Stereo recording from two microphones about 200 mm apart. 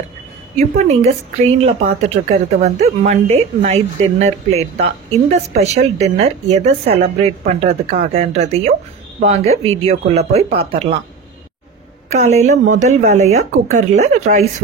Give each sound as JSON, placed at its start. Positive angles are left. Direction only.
{"t": 0.6, "sound": "a woman's voice", "side_deg": -35}
{"t": 12.1, "sound": "a woman's voice", "side_deg": -35}